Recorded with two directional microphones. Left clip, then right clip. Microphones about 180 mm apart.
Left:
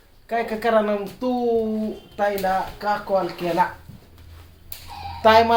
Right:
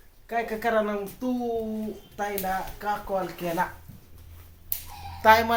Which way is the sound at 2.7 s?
Centre (ahead or behind).